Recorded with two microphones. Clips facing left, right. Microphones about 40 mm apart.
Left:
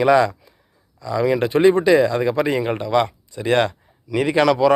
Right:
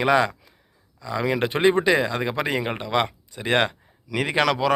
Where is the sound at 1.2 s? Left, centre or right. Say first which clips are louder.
Left 5 dB; right.